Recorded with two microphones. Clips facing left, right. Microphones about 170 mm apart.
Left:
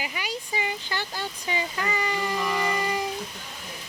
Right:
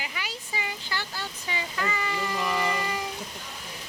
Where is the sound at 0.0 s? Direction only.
15° left (ahead or behind).